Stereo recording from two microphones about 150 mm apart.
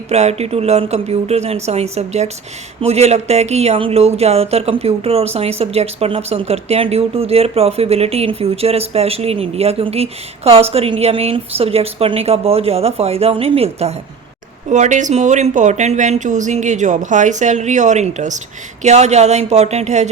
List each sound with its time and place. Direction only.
0.1 s speech: 45° right (ahead or behind)
14.7 s speech: 55° right (ahead or behind)